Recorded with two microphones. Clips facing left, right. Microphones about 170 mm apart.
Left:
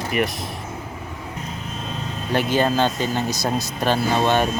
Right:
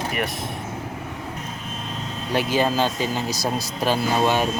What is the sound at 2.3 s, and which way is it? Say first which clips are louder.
Speech: left 2 dB; 5° right (ahead or behind).